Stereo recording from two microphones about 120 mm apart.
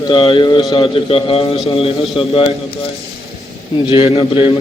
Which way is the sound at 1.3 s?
55° left (ahead or behind).